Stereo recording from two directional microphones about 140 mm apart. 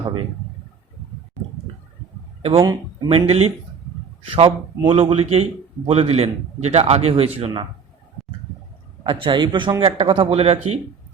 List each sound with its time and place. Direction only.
2.4 s a man's voice: 40° right (ahead or behind)
9.0 s a man's voice: 35° right (ahead or behind)